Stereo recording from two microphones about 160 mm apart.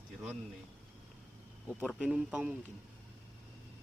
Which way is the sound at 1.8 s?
5° right (ahead or behind).